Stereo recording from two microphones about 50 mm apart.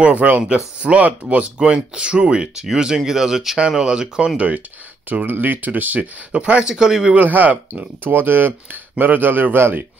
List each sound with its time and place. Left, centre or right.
0.0 s speech: right
5.2 s speech: right
6.3 s speech: right
7.2 s speech: right